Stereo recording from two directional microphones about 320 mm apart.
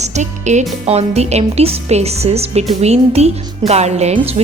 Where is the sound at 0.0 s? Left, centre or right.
Right.